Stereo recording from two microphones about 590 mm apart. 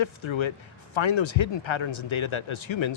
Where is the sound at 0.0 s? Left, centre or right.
Left.